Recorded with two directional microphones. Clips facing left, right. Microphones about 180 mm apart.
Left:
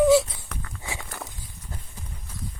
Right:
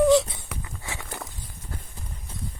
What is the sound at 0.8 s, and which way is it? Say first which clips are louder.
Walk: left 4 dB; 15° left (ahead or behind).